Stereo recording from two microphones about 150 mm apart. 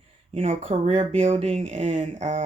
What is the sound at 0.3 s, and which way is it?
Speech, 40° right (ahead or behind).